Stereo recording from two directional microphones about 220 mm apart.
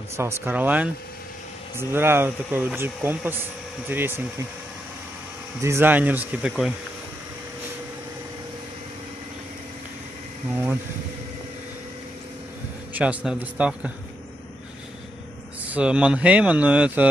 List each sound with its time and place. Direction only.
0.2 s speech: 10° right (ahead or behind)
5.6 s speech: 10° right (ahead or behind)
12.9 s speech: 5° right (ahead or behind)
15.7 s speech: 5° right (ahead or behind)